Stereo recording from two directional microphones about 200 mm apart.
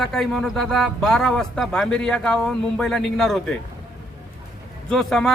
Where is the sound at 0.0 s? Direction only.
Centre (ahead or behind).